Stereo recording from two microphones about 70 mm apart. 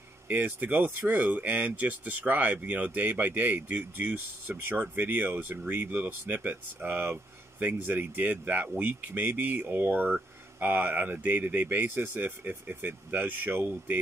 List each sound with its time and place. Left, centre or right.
0.3 s speech: right